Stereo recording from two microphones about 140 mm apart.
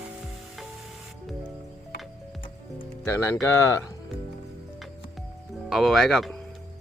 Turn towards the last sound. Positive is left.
turn(degrees=0)  # may be behind; listen again after turning